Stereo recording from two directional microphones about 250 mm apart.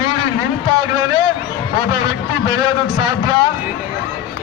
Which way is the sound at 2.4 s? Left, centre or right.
Centre.